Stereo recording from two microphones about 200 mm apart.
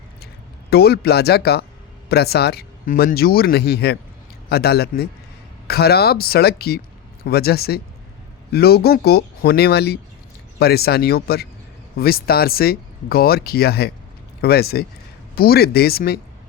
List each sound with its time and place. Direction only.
0.7 s speech: 55° left (ahead or behind)